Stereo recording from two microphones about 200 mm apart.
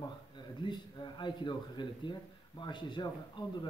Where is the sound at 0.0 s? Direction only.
25° left (ahead or behind).